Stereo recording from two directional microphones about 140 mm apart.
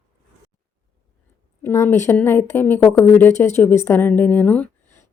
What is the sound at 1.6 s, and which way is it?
Speech, 20° left (ahead or behind).